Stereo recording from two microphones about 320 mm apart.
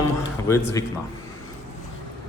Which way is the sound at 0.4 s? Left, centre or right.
Centre.